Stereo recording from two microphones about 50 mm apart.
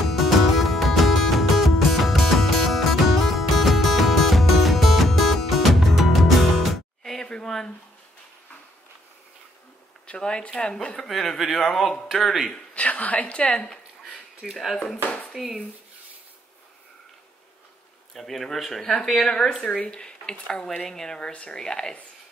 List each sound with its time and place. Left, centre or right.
0.0 s music: centre
7.4 s a sound: centre
10.0 s speech: centre
11.0 s a man's voice: centre
12.7 s speech: left
14.4 s a man's voice: centre
15.0 s dishes: left
18.1 s speech: centre
21.3 s speech: left
21.5 s speech: centre